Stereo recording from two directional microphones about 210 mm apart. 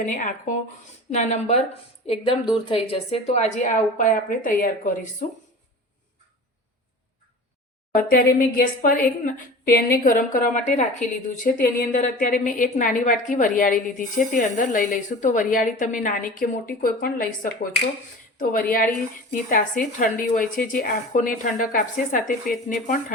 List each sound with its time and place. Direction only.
0.0 s a woman's voice: 35° left (ahead or behind)
8.1 s a woman's voice: 45° left (ahead or behind)
19.3 s a woman's voice: 40° left (ahead or behind)